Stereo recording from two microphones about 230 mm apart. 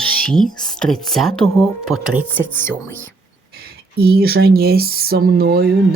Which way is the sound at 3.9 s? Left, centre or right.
Right.